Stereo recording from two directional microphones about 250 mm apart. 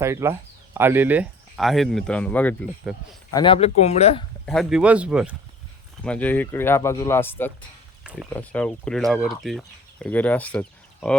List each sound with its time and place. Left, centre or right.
0.0 s speech: centre
3.3 s speech: left
4.4 s speech: centre